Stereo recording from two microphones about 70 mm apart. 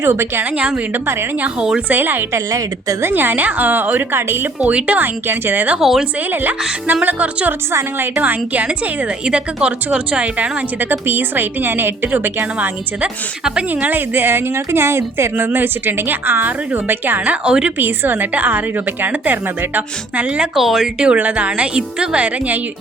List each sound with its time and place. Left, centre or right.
0.0 s a woman's voice: right
1.5 s a woman's voice: centre
1.9 s a woman's voice: right
5.8 s speech: centre
6.3 s a woman's voice: right
7.7 s a woman's voice: right
8.1 s a woman's voice: right
13.9 s a woman's voice: right
17.4 s a woman's voice: centre
17.7 s a woman's voice: right
20.6 s speech: centre
21.0 s a woman's voice: centre